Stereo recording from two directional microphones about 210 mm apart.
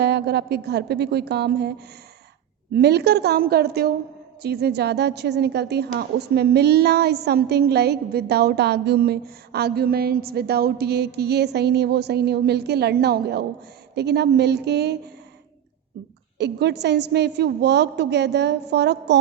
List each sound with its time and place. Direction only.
0.0 s a woman's voice: 50° right (ahead or behind)
2.7 s a woman's voice: 50° right (ahead or behind)
16.4 s a woman's voice: 55° right (ahead or behind)